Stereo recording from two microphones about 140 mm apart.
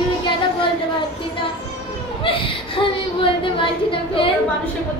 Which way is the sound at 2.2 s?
40° left (ahead or behind).